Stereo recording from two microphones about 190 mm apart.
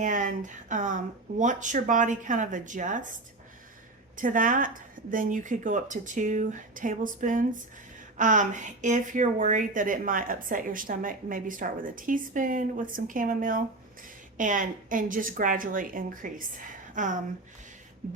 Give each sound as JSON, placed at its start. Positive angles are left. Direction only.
{"t": 0.0, "sound": "speech", "side_deg": -45}
{"t": 4.2, "sound": "speech", "side_deg": -45}